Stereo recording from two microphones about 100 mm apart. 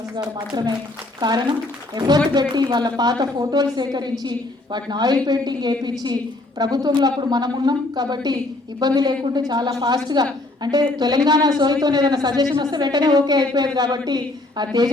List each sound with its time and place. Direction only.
0.3 s a woman's voice: 45° right (ahead or behind)